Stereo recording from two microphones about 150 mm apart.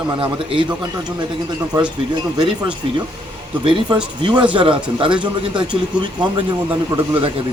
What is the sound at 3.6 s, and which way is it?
Speech, 35° right (ahead or behind).